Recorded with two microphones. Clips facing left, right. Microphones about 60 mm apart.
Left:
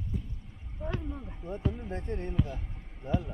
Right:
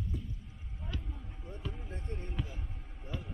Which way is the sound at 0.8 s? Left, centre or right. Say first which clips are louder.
Left 9 dB; left.